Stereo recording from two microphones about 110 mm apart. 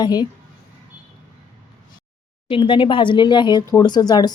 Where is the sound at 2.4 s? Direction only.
55° left (ahead or behind).